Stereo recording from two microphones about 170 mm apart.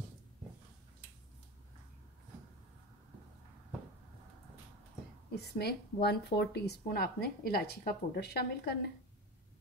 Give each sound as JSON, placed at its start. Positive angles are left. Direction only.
{"t": 5.3, "sound": "speech", "side_deg": 75}